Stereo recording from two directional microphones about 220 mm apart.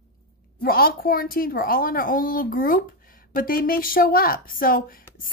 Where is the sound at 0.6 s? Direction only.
40° left (ahead or behind).